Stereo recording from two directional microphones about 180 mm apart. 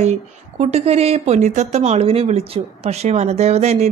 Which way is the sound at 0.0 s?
40° right (ahead or behind).